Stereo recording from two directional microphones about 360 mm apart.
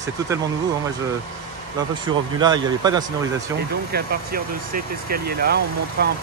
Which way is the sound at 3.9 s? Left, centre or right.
Right.